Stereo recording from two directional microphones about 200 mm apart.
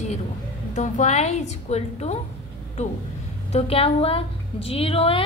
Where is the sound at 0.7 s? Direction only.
35° left (ahead or behind).